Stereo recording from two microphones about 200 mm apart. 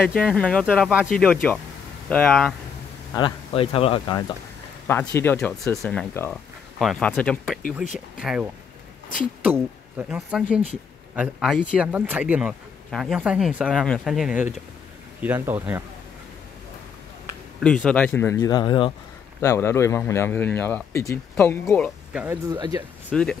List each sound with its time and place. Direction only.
0.2 s speech: 5° left (ahead or behind)
3.2 s speech: 25° left (ahead or behind)
4.8 s speech: 10° left (ahead or behind); by 15.8 s 10° right (ahead or behind)
17.6 s speech: 5° left (ahead or behind); by 18.9 s 25° left (ahead or behind)
19.4 s speech: 15° left (ahead or behind)
22.1 s speech: 10° right (ahead or behind)